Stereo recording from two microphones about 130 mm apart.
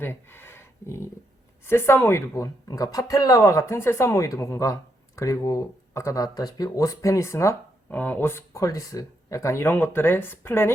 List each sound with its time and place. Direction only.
0.0 s speech: 15° left (ahead or behind)